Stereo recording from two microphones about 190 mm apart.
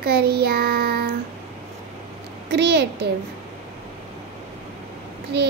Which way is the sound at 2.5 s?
60° right (ahead or behind).